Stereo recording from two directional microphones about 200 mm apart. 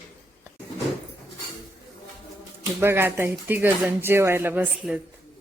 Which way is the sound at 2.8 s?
10° right (ahead or behind).